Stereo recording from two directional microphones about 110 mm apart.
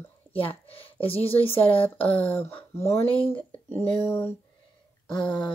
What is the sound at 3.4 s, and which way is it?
Speech, 15° left (ahead or behind).